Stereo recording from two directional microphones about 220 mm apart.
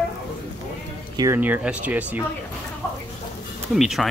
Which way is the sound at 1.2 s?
10° right (ahead or behind).